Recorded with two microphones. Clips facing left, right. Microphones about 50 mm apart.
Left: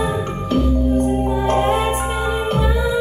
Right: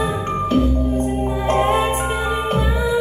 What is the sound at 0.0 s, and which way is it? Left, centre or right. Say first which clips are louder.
Music: right 1 dB; right.